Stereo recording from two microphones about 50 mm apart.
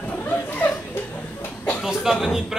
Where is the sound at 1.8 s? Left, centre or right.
Centre.